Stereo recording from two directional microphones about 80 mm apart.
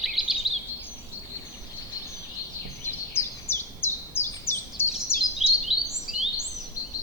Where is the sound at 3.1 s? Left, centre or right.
Left.